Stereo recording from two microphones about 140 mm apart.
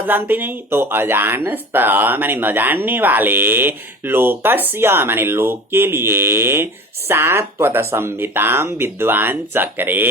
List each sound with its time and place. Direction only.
0.0 s speech: 15° right (ahead or behind)